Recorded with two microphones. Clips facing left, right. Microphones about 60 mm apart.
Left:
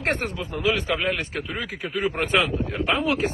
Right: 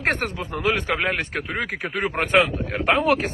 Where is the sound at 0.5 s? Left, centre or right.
Right.